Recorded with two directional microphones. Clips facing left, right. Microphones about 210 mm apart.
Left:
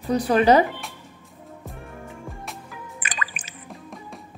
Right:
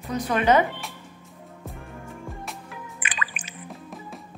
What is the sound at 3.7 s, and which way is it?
Music, centre (ahead or behind).